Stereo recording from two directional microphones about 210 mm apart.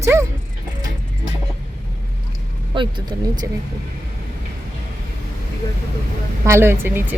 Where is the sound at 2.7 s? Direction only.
25° right (ahead or behind).